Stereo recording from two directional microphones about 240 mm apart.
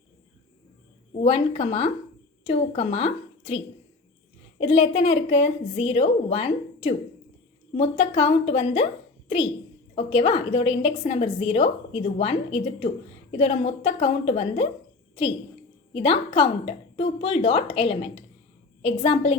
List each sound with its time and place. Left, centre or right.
1.2 s a woman's voice: left
9.9 s a woman's voice: left
13.4 s a woman's voice: left
15.9 s a woman's voice: left